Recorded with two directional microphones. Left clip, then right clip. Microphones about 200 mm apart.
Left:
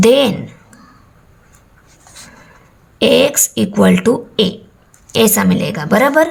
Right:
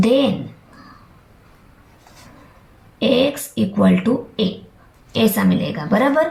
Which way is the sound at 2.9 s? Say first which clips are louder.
Left 6 dB; 50° left (ahead or behind).